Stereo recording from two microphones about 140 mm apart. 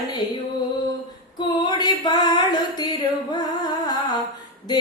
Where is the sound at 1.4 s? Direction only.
30° left (ahead or behind).